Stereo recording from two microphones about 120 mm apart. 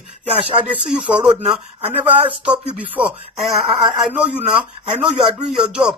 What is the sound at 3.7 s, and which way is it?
Speech, 40° right (ahead or behind).